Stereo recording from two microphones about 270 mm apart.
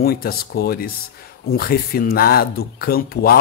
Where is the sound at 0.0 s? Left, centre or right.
Left.